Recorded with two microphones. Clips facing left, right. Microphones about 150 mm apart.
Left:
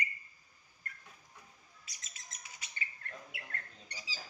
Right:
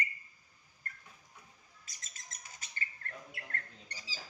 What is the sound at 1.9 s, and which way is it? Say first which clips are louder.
Bird: right 1 dB; 45° right (ahead or behind).